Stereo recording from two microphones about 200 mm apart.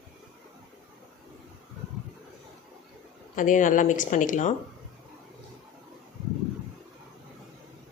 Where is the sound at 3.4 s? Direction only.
40° left (ahead or behind).